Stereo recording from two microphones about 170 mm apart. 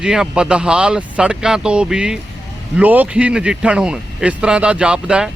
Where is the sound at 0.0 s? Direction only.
5° right (ahead or behind).